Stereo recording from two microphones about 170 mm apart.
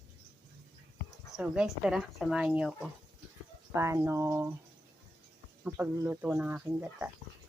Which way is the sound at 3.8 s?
15° right (ahead or behind).